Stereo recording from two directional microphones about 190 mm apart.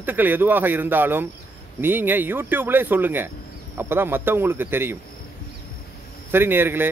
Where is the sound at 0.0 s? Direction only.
10° right (ahead or behind).